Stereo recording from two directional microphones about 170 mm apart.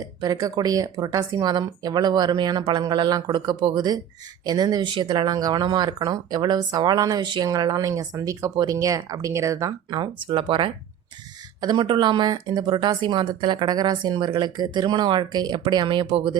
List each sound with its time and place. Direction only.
0.0 s speech: 20° right (ahead or behind)